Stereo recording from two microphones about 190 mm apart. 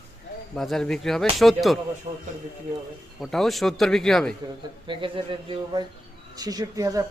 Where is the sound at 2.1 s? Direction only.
35° right (ahead or behind).